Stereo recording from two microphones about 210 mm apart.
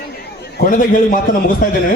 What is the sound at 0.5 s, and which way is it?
Speech, 40° left (ahead or behind).